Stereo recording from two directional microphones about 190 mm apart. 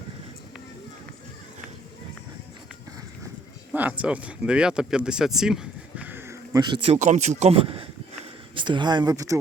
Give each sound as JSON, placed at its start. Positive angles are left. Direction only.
{"t": 3.7, "sound": "speech", "side_deg": -10}
{"t": 6.9, "sound": "speech", "side_deg": -40}